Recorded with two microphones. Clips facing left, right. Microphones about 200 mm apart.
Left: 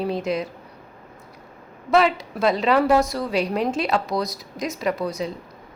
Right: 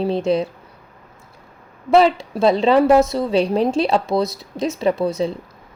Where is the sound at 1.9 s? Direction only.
30° right (ahead or behind).